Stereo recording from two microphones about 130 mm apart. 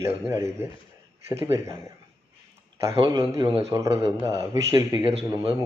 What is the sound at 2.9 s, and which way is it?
Speech, 40° right (ahead or behind).